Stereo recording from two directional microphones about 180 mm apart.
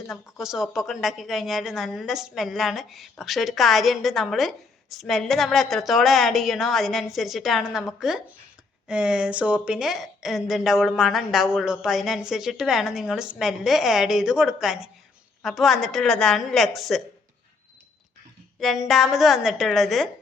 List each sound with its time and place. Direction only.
0.1 s a woman's voice: centre (ahead or behind)
18.6 s a woman's voice: centre (ahead or behind)